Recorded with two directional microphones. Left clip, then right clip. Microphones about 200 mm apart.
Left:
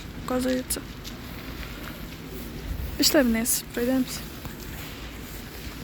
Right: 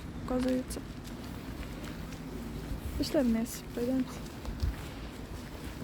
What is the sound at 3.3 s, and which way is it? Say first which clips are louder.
Speech: left 7 dB; centre (ahead or behind).